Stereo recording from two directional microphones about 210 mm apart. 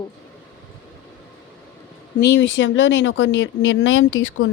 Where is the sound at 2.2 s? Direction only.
55° left (ahead or behind).